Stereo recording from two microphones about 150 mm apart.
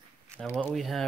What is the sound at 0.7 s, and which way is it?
Speech, centre (ahead or behind).